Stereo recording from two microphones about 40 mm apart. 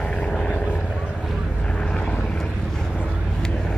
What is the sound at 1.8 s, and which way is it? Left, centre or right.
Vehicle, centre.